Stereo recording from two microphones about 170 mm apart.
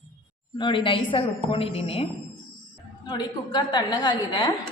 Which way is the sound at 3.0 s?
25° left (ahead or behind).